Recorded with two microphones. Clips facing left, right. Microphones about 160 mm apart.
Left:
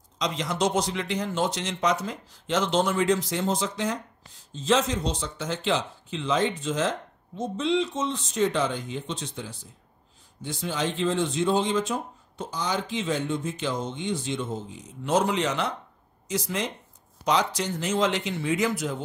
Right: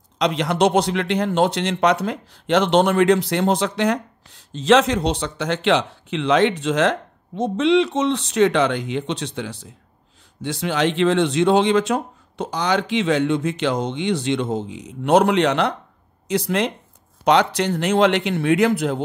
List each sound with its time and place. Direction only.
0.2 s speech: 65° right (ahead or behind)